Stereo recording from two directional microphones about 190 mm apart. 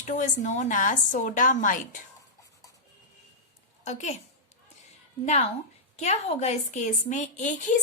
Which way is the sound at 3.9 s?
40° left (ahead or behind).